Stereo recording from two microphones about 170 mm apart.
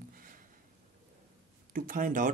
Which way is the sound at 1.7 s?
55° right (ahead or behind).